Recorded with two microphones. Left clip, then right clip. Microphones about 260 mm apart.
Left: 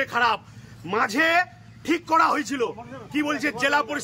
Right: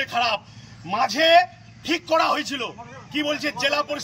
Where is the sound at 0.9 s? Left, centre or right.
Left.